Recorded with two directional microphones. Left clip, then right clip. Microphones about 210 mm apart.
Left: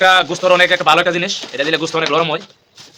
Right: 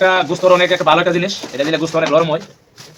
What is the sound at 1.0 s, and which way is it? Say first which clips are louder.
Speech: even; 30° left (ahead or behind).